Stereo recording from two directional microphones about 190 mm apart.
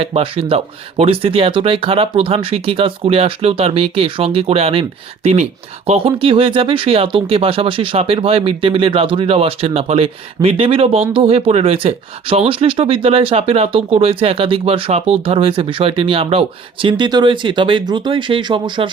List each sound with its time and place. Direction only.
0.0 s speech: 30° right (ahead or behind)